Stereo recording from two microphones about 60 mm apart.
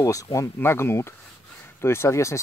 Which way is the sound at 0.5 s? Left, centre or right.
Left.